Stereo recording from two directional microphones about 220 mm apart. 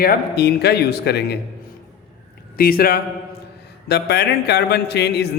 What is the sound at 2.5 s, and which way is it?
Speech, 40° left (ahead or behind).